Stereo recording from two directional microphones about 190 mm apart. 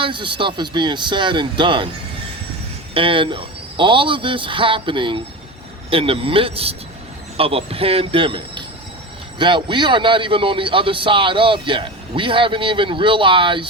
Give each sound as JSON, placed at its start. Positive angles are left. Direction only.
{"t": 0.0, "sound": "a man's voice", "side_deg": -25}
{"t": 2.9, "sound": "a man's voice", "side_deg": -25}